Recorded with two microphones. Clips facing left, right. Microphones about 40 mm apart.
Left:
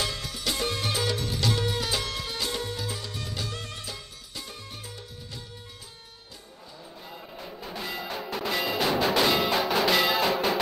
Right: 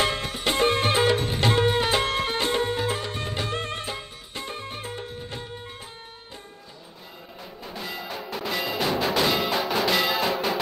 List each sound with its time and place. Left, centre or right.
0.0 s music: right
7.4 s music: centre